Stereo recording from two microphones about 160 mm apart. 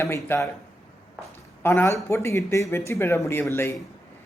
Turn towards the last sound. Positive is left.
turn(degrees=15)  # may be behind; listen again after turning